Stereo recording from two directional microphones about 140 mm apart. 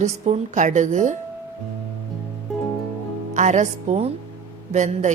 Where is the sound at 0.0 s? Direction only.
55° right (ahead or behind).